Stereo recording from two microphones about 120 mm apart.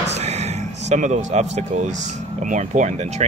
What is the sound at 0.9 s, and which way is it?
Speech, 80° right.